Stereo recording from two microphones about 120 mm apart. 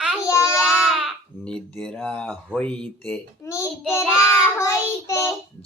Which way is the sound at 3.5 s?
25° left (ahead or behind).